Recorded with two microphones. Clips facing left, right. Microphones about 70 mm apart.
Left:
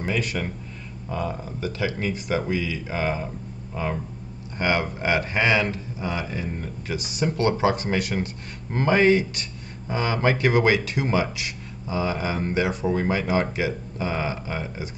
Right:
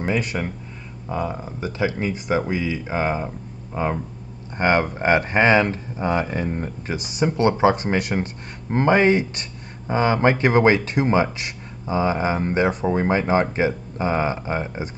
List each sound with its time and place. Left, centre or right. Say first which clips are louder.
0.0 s speech: right 3 dB; right
1.0 s speech: right 3 dB; right
2.0 s speech: right 3 dB; centre
2.5 s speech: right 3 dB; right
7.2 s speech: right 4 dB; centre
7.6 s speech: right 5 dB; right
8.0 s speech: right 2 dB; right
8.6 s speech: right 2 dB; right
9.8 s speech: right 5 dB; right